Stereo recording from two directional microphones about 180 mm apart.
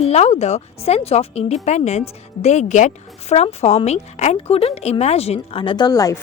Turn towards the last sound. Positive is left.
turn(degrees=20)  # may be behind; listen again after turning